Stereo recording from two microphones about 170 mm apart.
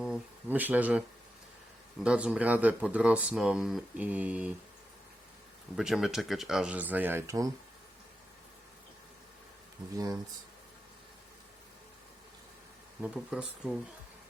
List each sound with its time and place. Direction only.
0.0 s speech: 5° right (ahead or behind)
2.0 s speech: 5° right (ahead or behind)
5.7 s speech: centre (ahead or behind); by 7.5 s 20° right (ahead or behind)
9.9 s speech: 20° right (ahead or behind)
13.0 s speech: 5° right (ahead or behind)